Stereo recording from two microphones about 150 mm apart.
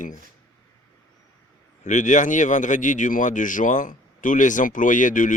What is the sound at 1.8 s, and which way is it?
A man's voice, 55° left (ahead or behind).